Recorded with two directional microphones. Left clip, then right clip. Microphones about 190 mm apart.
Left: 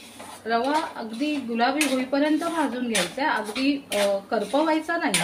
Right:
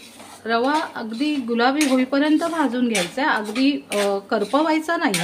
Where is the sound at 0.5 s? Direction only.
65° right (ahead or behind).